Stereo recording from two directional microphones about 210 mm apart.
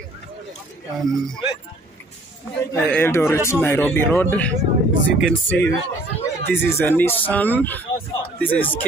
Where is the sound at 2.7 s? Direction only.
10° left (ahead or behind).